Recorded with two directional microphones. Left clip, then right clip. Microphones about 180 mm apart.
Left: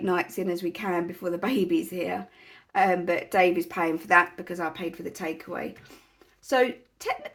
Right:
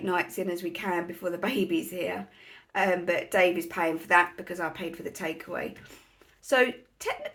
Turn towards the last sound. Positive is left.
turn(degrees=30)  # may be behind; listen again after turning